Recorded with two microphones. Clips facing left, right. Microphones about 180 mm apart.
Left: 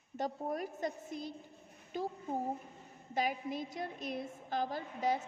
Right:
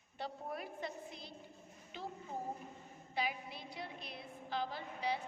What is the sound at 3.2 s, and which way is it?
A woman's voice, 45° left (ahead or behind).